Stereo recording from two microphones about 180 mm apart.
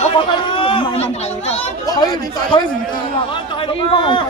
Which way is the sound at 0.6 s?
30° left (ahead or behind).